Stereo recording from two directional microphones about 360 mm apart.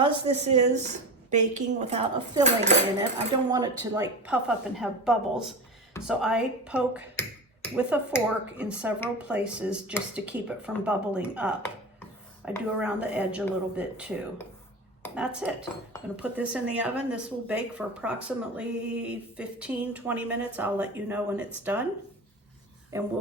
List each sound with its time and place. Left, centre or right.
0.0 s a woman's voice: centre
22.9 s speech: centre